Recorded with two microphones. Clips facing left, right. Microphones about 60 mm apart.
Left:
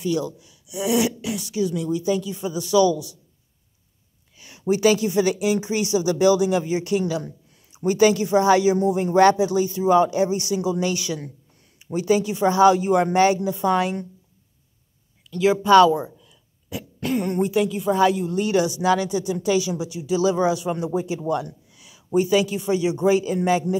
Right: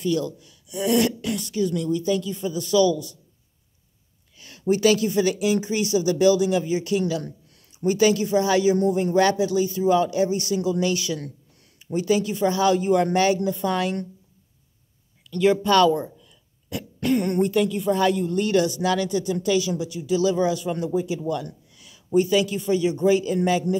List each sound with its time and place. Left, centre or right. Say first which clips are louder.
0.0 s speech: even; centre
4.4 s speech: even; centre
7.2 s a sound: even; centre
7.7 s speech: left 2 dB; left
8.7 s speech: left 2 dB; centre
15.3 s speech: left 4 dB; centre